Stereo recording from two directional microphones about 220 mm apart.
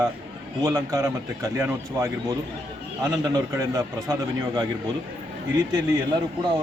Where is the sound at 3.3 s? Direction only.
15° right (ahead or behind).